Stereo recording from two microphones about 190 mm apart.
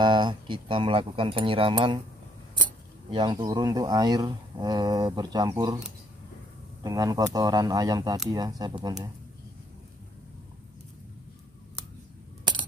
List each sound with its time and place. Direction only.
0.0 s speech: 25° right (ahead or behind)
3.1 s speech: 25° right (ahead or behind)
6.8 s speech: 20° right (ahead or behind)